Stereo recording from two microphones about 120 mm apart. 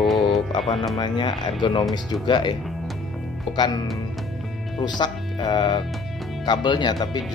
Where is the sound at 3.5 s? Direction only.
35° left (ahead or behind).